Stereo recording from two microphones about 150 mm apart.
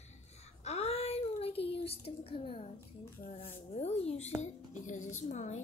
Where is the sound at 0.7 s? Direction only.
45° left (ahead or behind).